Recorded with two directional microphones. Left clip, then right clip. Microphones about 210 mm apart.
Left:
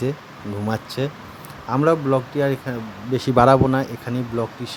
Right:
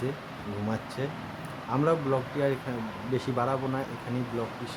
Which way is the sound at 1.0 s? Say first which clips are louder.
Left 7 dB; 35° left (ahead or behind).